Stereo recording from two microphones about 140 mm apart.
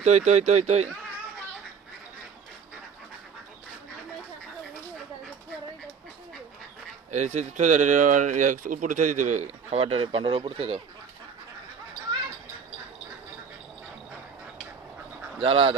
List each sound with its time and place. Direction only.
0.0 s speech: 55° right (ahead or behind)
7.1 s speech: 60° right (ahead or behind); by 10.8 s 40° right (ahead or behind)
15.4 s speech: 40° right (ahead or behind)